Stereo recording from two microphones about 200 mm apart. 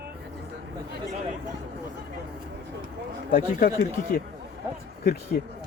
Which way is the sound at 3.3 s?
45° left (ahead or behind).